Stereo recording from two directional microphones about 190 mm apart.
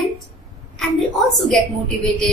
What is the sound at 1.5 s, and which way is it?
Speech, 5° left (ahead or behind).